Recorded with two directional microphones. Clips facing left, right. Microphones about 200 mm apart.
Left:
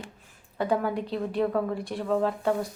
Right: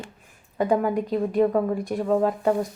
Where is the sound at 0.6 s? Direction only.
15° right (ahead or behind).